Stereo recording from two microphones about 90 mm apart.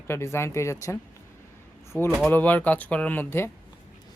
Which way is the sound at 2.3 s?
20° left (ahead or behind).